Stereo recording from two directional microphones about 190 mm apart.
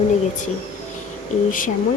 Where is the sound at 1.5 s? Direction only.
45° left (ahead or behind).